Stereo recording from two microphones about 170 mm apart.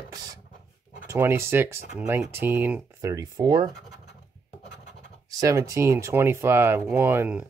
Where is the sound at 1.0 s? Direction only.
15° right (ahead or behind).